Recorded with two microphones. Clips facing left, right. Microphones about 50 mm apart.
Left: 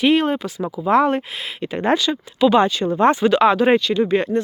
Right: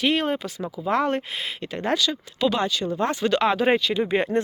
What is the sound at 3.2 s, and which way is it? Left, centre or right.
Speech, centre.